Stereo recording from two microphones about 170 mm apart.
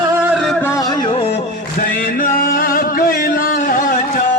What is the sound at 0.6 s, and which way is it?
Music, 20° left (ahead or behind).